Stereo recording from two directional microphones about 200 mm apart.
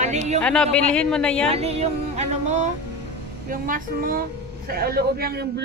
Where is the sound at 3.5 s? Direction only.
45° right (ahead or behind).